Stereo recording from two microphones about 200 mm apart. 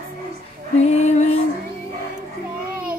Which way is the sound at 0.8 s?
35° left (ahead or behind).